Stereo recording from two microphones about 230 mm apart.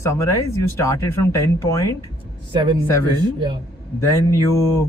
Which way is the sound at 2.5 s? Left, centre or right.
Right.